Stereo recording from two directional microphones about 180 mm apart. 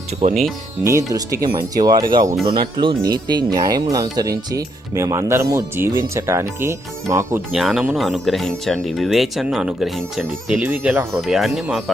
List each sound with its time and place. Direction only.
0.2 s speech: 35° right (ahead or behind)
1.1 s speech: 20° right (ahead or behind)
7.5 s speech: centre (ahead or behind)